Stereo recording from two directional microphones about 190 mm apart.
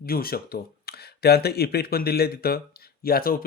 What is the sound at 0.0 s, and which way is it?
Speech, 50° left (ahead or behind).